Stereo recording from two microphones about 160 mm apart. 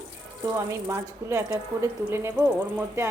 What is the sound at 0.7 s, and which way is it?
A woman's voice, 15° right (ahead or behind).